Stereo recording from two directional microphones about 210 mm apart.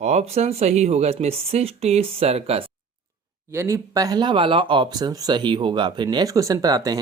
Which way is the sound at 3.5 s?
15° right (ahead or behind).